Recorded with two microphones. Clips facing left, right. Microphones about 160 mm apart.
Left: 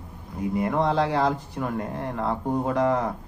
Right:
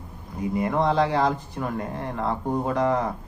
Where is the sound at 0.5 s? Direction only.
5° left (ahead or behind).